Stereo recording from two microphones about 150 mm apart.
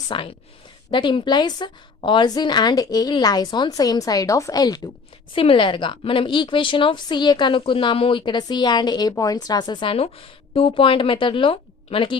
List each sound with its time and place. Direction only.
0.1 s a woman's voice: 35° left (ahead or behind)
5.3 s speech: 35° left (ahead or behind)